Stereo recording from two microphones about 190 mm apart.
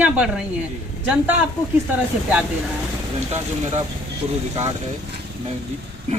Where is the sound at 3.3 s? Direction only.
35° right (ahead or behind).